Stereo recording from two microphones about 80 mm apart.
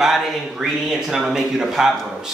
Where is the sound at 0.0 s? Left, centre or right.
Centre.